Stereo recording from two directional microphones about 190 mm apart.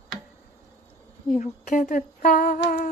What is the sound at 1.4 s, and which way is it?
Humming, 40° left (ahead or behind).